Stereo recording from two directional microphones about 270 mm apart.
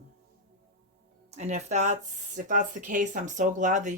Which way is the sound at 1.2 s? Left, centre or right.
Right.